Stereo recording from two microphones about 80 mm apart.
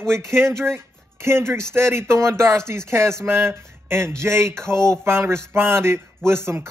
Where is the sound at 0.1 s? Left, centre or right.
Right.